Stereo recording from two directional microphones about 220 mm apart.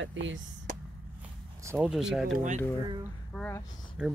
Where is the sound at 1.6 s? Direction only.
10° right (ahead or behind).